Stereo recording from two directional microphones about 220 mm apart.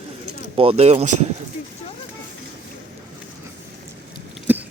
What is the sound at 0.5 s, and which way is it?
Speech, 25° right (ahead or behind).